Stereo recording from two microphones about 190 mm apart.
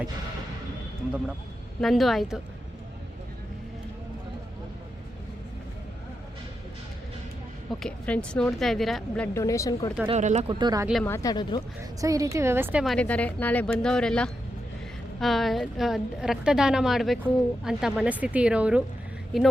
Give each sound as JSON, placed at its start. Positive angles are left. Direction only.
{"t": 1.8, "sound": "a woman's voice", "side_deg": 0}
{"t": 7.7, "sound": "a woman's voice", "side_deg": 5}
{"t": 9.4, "sound": "speech", "side_deg": 15}
{"t": 10.1, "sound": "speech", "side_deg": -40}
{"t": 10.6, "sound": "speech", "side_deg": -20}
{"t": 11.0, "sound": "speech", "side_deg": 15}
{"t": 11.8, "sound": "a woman's voice", "side_deg": -15}
{"t": 12.8, "sound": "a woman's voice", "side_deg": 5}